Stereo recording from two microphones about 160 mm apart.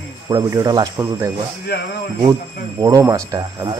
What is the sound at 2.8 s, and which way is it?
Speech, 25° right (ahead or behind).